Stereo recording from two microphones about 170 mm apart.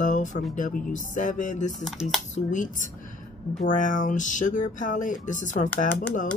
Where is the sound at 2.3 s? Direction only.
50° left (ahead or behind).